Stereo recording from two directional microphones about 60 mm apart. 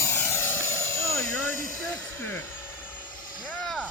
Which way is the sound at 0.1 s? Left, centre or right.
Left.